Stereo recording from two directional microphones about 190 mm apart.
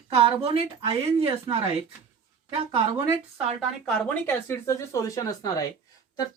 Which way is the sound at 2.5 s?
30° right (ahead or behind).